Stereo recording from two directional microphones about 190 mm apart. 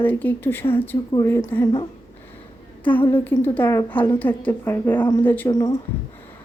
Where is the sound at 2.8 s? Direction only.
10° left (ahead or behind).